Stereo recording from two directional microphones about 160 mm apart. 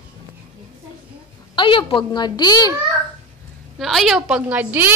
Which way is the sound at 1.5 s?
30° left (ahead or behind).